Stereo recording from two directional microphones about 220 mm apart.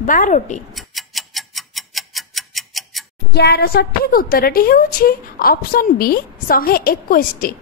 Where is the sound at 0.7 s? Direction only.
Centre (ahead or behind).